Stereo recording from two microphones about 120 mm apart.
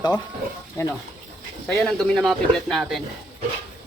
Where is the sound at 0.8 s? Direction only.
25° left (ahead or behind).